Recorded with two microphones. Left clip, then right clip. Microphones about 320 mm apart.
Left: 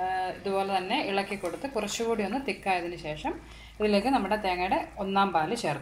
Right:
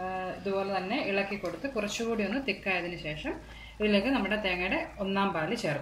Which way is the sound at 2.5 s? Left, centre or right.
Centre.